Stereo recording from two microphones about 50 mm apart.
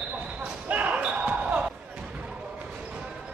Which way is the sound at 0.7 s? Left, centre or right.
Right.